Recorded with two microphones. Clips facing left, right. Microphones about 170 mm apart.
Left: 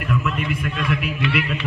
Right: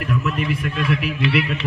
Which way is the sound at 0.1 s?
40° right (ahead or behind).